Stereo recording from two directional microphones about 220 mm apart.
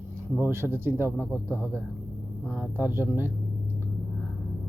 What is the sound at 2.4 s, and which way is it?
Speech, 5° right (ahead or behind).